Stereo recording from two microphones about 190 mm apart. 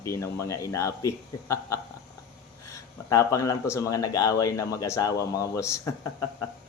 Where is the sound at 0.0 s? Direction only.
15° left (ahead or behind).